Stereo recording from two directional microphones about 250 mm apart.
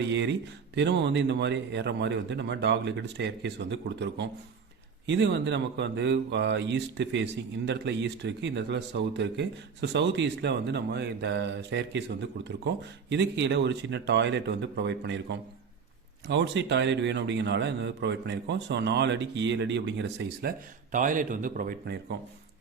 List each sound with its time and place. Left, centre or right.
0.0 s speech: right